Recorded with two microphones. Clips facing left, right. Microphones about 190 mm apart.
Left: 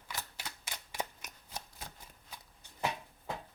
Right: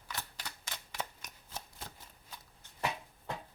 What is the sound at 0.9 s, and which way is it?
Shuffling cards, 15° left (ahead or behind).